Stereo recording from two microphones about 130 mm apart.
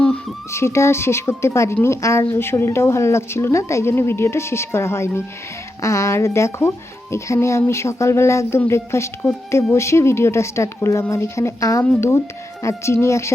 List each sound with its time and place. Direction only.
0.5 s speech: 20° left (ahead or behind)